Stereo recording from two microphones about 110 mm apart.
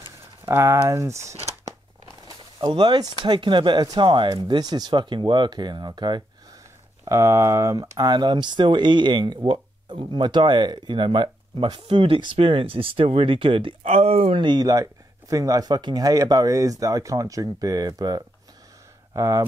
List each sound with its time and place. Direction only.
0.5 s speech: 20° right (ahead or behind)
2.6 s speech: 50° right (ahead or behind)
7.1 s speech: 25° right (ahead or behind); by 13.7 s 55° right (ahead or behind)
13.8 s speech: 65° right (ahead or behind)
14.4 s speech: 40° right (ahead or behind)
19.1 s speech: 25° right (ahead or behind)